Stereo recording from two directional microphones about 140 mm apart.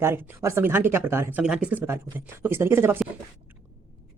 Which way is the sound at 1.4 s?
5° right (ahead or behind).